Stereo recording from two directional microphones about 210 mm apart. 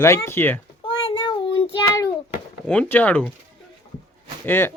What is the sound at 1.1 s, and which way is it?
Child singing, 20° left (ahead or behind).